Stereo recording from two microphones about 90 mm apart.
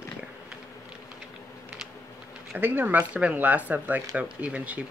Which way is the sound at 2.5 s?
25° right (ahead or behind).